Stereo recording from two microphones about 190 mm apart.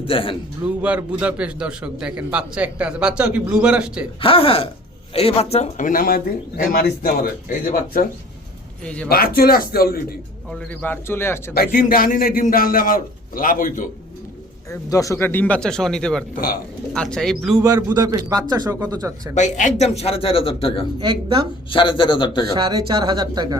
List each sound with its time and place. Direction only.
0.0 s a man's voice: 30° left (ahead or behind)
0.6 s a man's voice: 5° right (ahead or behind)
4.2 s a man's voice: 30° left (ahead or behind); by 8.0 s 45° left (ahead or behind)
8.8 s a man's voice: 5° left (ahead or behind)
9.0 s a man's voice: 55° left (ahead or behind)
10.5 s speech: 5° left (ahead or behind)
11.5 s a man's voice: 50° left (ahead or behind)
14.7 s a man's voice: 15° left (ahead or behind); by 17.6 s centre (ahead or behind)
17.6 s speech: 20° right (ahead or behind)
19.3 s a man's voice: 40° left (ahead or behind)
21.0 s speech: 30° right (ahead or behind)
21.7 s a man's voice: 25° left (ahead or behind)
22.5 s speech: 25° right (ahead or behind)